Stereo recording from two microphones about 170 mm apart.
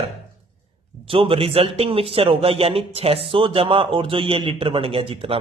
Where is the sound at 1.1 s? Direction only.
30° right (ahead or behind).